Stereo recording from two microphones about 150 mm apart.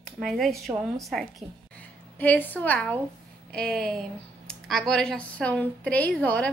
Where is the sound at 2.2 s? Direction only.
10° left (ahead or behind).